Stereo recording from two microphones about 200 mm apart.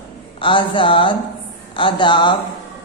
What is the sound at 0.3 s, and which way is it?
Speech, 25° left (ahead or behind).